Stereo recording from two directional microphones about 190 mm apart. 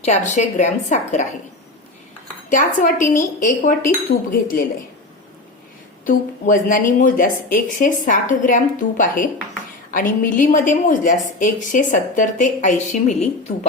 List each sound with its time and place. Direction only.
0.0 s a woman's voice: 35° left (ahead or behind)
2.5 s a woman's voice: 40° left (ahead or behind)
6.1 s a woman's voice: 45° left (ahead or behind)